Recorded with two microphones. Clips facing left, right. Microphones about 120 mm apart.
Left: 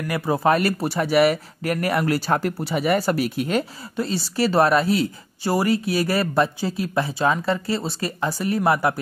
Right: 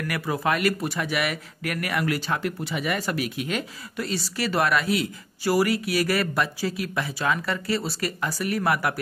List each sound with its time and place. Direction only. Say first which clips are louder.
0.1 s speech: left 7 dB; 30° left (ahead or behind)